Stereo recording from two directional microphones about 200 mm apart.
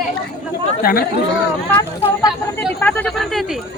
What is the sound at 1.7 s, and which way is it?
Speech, 20° left (ahead or behind).